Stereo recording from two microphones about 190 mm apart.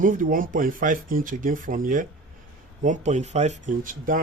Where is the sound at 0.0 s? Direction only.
45° right (ahead or behind).